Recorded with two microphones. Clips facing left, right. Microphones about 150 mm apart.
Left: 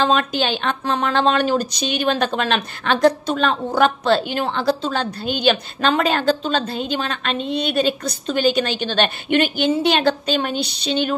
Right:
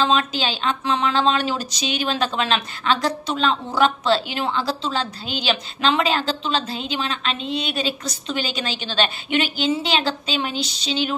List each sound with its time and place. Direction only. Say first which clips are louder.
0.0 s speech: left 2 dB; 55° left (ahead or behind)